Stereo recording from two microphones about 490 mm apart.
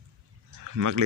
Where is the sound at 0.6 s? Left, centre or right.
Right.